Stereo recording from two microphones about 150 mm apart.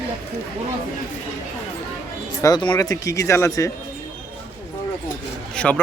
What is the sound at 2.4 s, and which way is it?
Speech, 25° left (ahead or behind).